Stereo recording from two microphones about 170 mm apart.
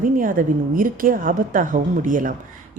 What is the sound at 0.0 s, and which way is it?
A woman's voice, 50° right (ahead or behind).